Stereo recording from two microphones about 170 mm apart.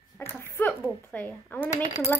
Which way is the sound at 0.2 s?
15° left (ahead or behind).